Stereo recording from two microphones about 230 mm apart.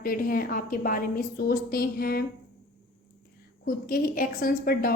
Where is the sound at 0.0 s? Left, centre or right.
Left.